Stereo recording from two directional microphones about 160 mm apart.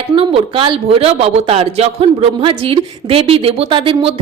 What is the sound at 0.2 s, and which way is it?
A woman's voice, 35° right (ahead or behind).